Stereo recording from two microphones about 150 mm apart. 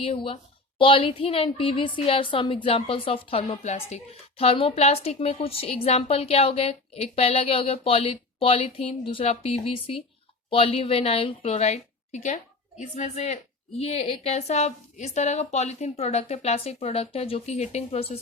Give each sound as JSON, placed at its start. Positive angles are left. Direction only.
{"t": 0.0, "sound": "a woman's voice", "side_deg": 40}